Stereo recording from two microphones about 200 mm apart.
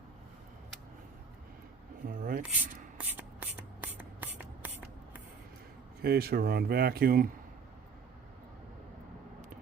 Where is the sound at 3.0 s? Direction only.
10° right (ahead or behind).